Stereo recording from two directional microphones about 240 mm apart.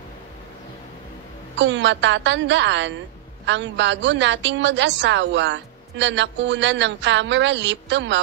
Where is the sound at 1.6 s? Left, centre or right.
Right.